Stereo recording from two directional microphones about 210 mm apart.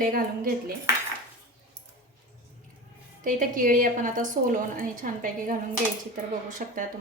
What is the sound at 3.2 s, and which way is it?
A woman's voice, 40° right (ahead or behind).